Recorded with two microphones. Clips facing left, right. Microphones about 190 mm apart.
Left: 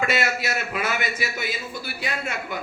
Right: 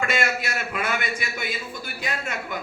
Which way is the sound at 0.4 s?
5° left (ahead or behind).